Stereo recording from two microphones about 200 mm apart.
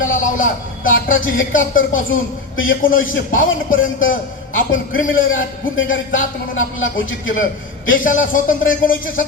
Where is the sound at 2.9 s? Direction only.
80° left.